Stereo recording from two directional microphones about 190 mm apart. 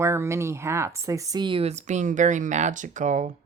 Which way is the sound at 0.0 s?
15° right (ahead or behind).